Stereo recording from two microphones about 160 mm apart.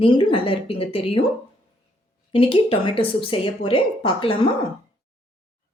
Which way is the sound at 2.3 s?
35° left (ahead or behind).